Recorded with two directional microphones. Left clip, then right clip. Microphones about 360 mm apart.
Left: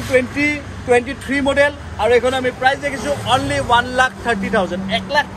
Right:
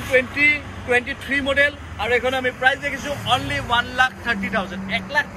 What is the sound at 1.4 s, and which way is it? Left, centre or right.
A man's voice, left.